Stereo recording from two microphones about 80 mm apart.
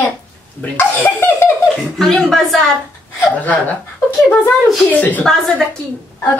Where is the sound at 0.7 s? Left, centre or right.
Left.